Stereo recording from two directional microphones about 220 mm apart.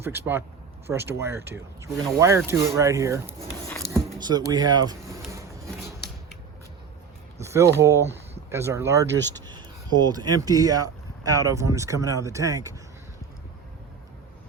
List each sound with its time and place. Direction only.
0.0 s speech: 10° right (ahead or behind)
5.3 s a sound: 15° right (ahead or behind)
7.4 s speech: 15° right (ahead or behind)